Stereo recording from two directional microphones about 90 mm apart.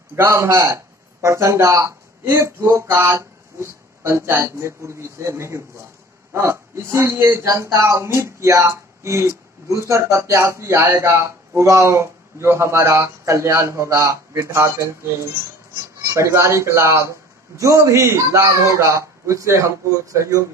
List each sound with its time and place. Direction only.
0.1 s a man's voice: 30° right (ahead or behind)
16.1 s speech: 35° right (ahead or behind)